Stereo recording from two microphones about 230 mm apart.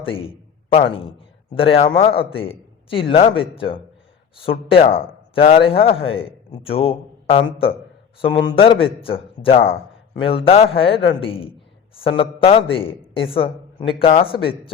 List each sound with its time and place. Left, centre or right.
0.0 s a man's voice: left
4.7 s a man's voice: left